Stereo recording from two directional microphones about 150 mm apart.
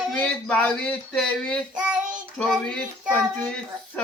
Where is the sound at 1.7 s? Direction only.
5° right (ahead or behind).